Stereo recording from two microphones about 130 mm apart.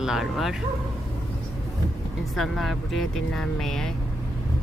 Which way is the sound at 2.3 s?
Centre (ahead or behind).